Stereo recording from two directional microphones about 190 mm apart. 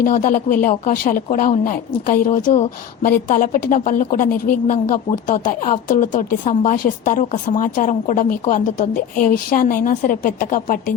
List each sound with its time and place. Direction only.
0.0 s speech: 45° left (ahead or behind)